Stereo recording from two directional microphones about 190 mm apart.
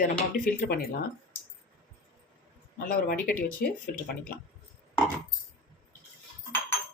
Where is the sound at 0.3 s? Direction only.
45° left (ahead or behind).